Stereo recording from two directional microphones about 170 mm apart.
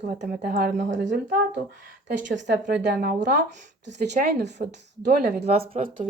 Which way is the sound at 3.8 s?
85° right.